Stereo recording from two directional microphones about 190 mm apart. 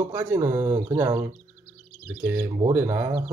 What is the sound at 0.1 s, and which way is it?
Speech, 15° right (ahead or behind).